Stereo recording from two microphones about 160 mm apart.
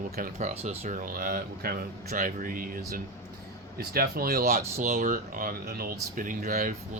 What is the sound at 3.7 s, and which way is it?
Speech, 70° right (ahead or behind).